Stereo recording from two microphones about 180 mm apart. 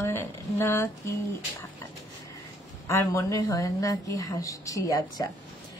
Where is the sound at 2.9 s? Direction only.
15° left (ahead or behind).